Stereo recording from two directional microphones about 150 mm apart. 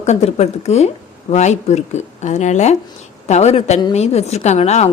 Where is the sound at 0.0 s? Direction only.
50° left (ahead or behind).